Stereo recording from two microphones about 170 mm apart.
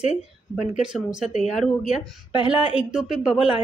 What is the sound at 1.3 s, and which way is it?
Speech, 40° left (ahead or behind).